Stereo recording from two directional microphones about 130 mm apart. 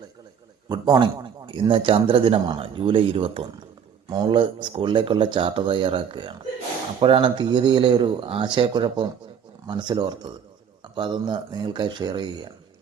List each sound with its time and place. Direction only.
0.7 s a man's voice: 30° right (ahead or behind)